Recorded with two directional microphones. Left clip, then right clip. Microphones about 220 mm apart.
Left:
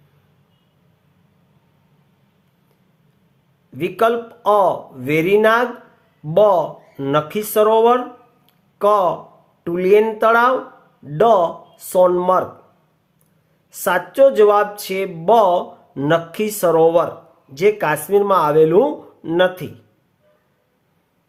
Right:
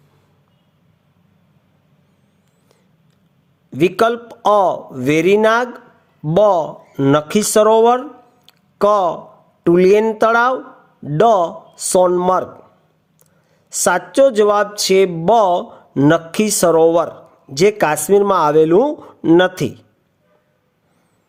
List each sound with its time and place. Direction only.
3.7 s speech: 35° right (ahead or behind)
8.4 s a sound: 35° right (ahead or behind)
9.6 s speech: 35° right (ahead or behind)
13.7 s speech: 35° right (ahead or behind)